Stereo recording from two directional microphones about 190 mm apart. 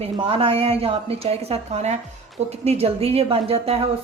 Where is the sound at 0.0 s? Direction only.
30° right (ahead or behind).